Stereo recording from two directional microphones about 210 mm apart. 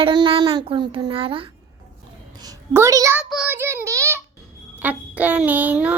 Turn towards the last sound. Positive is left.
turn(degrees=-10)  # may be behind; listen again after turning